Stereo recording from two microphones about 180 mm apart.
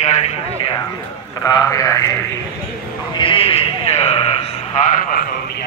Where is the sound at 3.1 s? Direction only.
30° left (ahead or behind).